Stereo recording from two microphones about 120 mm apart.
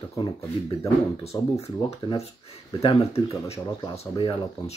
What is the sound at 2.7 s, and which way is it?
Speech, 45° left (ahead or behind).